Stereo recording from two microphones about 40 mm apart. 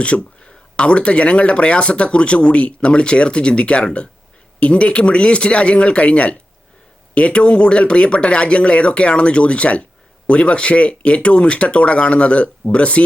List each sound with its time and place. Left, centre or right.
0.0 s speech: left